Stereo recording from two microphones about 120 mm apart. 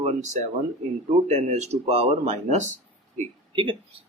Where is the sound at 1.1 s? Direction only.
60° right (ahead or behind).